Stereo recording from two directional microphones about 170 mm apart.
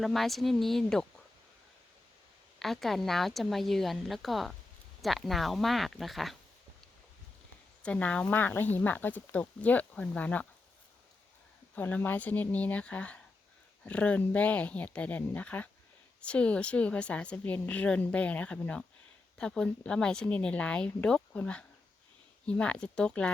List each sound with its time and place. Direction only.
0.0 s speech: centre (ahead or behind)
2.6 s speech: centre (ahead or behind)
7.8 s a woman's voice: 5° left (ahead or behind)
11.7 s a woman's voice: 10° left (ahead or behind)